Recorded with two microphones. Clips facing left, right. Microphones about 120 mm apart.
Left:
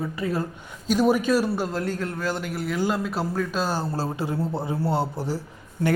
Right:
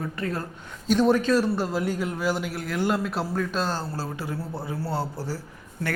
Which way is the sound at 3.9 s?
25° left (ahead or behind).